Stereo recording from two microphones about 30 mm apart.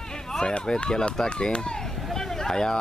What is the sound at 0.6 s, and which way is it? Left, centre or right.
Speech, left.